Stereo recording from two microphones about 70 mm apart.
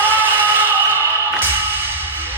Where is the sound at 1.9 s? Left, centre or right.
Right.